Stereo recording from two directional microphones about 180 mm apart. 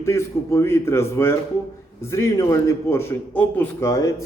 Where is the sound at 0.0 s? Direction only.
15° left (ahead or behind).